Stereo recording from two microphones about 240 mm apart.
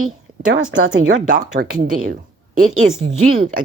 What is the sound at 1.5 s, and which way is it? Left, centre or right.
A woman's voice, right.